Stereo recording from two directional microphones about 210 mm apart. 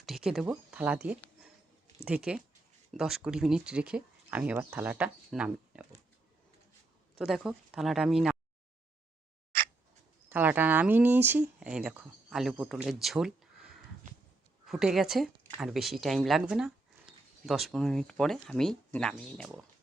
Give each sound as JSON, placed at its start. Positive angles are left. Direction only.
{"t": 0.0, "sound": "speech", "side_deg": 0}
{"t": 2.0, "sound": "speech", "side_deg": -5}
{"t": 7.2, "sound": "speech", "side_deg": 0}
{"t": 10.2, "sound": "speech", "side_deg": -10}